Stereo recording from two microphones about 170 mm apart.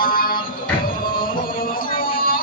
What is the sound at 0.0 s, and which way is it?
Music, 55° left (ahead or behind).